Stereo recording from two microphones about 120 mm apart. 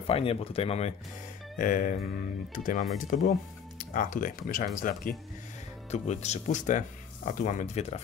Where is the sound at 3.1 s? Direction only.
90° left.